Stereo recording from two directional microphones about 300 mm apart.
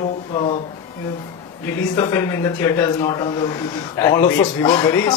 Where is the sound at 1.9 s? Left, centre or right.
Centre.